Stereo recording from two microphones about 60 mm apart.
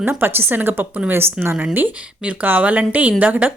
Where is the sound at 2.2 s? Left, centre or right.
Right.